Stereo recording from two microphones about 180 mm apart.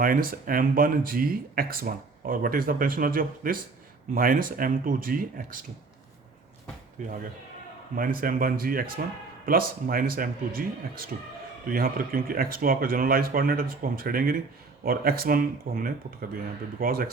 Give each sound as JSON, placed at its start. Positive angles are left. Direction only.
{"t": 0.0, "sound": "speech", "side_deg": -55}
{"t": 7.9, "sound": "speech", "side_deg": -50}